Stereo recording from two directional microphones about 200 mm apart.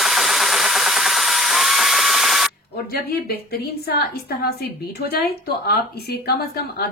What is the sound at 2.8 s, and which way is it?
A woman's voice, 50° left (ahead or behind).